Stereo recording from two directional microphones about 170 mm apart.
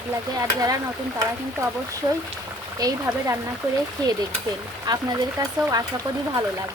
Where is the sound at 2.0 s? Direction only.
25° right (ahead or behind).